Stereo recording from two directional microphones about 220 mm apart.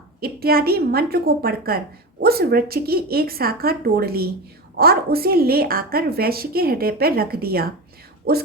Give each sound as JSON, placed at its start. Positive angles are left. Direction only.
{"t": 0.2, "sound": "a woman's voice", "side_deg": -45}